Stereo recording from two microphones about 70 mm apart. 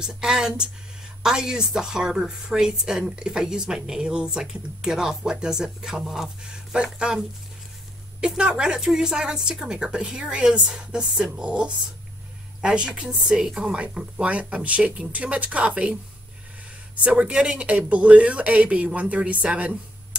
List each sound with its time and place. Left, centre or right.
0.0 s a woman's voice: centre
8.4 s a woman's voice: centre